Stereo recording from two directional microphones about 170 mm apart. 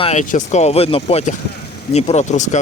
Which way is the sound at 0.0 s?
45° left (ahead or behind).